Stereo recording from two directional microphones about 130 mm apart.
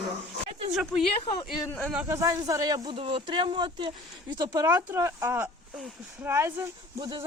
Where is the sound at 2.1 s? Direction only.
25° right (ahead or behind).